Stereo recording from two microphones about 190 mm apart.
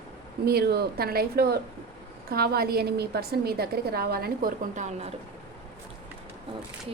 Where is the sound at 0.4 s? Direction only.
55° right (ahead or behind); by 5.1 s 35° right (ahead or behind).